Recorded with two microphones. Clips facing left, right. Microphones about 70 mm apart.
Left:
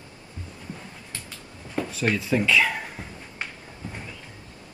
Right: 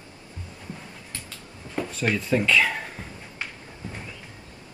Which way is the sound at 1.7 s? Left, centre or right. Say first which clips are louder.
Left 1 dB; centre.